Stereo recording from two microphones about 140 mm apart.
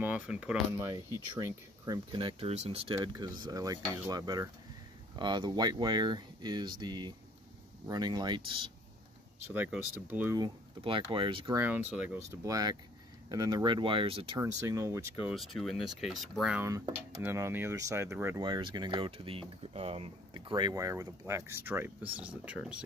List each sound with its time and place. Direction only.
0.0 s speech: 10° right (ahead or behind)
0.7 s speech: 25° right (ahead or behind)
2.1 s speech: 35° right (ahead or behind)
2.5 s speech: 50° right (ahead or behind)
3.0 s speech: 25° right (ahead or behind)
9.5 s speech: 15° right (ahead or behind)
10.8 s speech: 35° right (ahead or behind)
11.5 s speech: 10° right (ahead or behind)
12.4 s speech: 25° right (ahead or behind)
14.4 s speech: 20° right (ahead or behind)
15.2 s speech: centre (ahead or behind)
17.2 s speech: 15° right (ahead or behind)
18.4 s speech: 30° right (ahead or behind); by 22.8 s 10° right (ahead or behind)